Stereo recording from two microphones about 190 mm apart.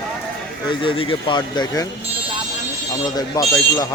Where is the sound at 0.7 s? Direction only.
25° left (ahead or behind).